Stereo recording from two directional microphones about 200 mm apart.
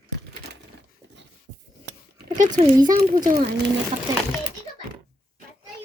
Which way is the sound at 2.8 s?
20° right (ahead or behind).